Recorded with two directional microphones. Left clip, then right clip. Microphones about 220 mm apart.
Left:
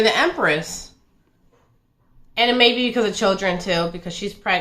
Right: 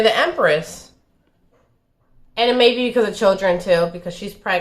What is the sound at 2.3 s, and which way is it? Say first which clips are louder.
Speech: right 1 dB; 15° right (ahead or behind).